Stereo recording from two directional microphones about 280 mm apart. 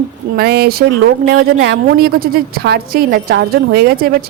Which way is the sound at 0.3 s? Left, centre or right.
Right.